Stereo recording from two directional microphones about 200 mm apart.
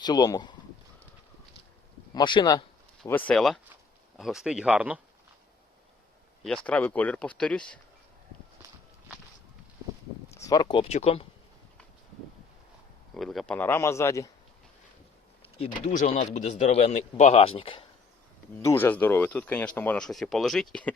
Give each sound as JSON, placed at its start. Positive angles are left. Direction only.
{"t": 0.0, "sound": "speech", "side_deg": 20}
{"t": 2.1, "sound": "speech", "side_deg": 20}
{"t": 3.0, "sound": "speech", "side_deg": 5}
{"t": 6.4, "sound": "speech", "side_deg": 5}
{"t": 10.3, "sound": "speech", "side_deg": 15}
{"t": 13.1, "sound": "speech", "side_deg": 0}
{"t": 15.6, "sound": "speech", "side_deg": 35}
{"t": 18.6, "sound": "speech", "side_deg": 10}